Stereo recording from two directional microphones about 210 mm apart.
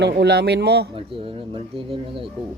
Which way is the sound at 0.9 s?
25° right (ahead or behind).